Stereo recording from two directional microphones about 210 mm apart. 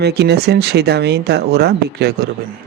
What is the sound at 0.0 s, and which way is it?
Speech, 50° right (ahead or behind).